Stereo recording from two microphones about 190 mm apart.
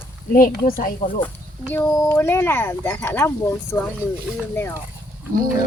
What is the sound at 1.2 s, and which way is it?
Speech, 10° left (ahead or behind).